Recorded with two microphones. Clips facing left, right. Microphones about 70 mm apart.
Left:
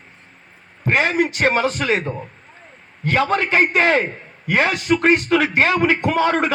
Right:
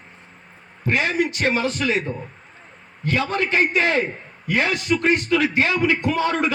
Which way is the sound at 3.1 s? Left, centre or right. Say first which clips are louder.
Left 4 dB; left.